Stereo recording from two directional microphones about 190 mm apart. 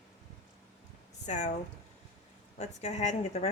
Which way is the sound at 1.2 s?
40° left (ahead or behind).